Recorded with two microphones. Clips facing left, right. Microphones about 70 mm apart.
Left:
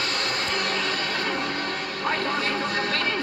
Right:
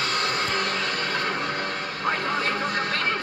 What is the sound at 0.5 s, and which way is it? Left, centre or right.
Music, right.